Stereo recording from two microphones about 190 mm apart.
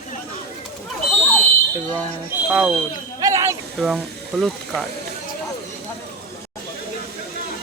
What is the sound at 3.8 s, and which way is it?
Speech, centre (ahead or behind).